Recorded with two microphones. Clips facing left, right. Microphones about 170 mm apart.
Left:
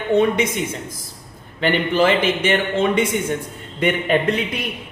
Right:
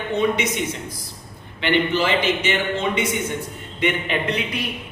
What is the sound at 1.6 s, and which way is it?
Speech, 50° left (ahead or behind).